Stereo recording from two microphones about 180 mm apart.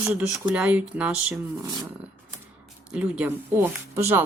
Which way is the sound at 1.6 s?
20° right (ahead or behind).